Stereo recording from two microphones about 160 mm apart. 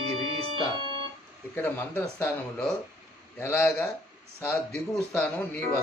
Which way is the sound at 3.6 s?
Centre (ahead or behind).